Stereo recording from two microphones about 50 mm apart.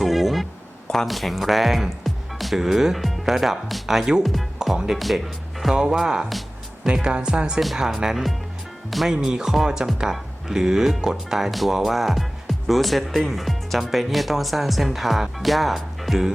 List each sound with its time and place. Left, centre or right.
0.0 s a sound: centre
0.9 s speech: centre
9.2 s speech: centre